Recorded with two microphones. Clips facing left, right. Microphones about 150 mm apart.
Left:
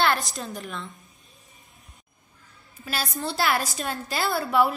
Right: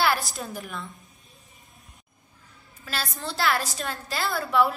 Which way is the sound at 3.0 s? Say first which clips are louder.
Left 2 dB; 20° left (ahead or behind).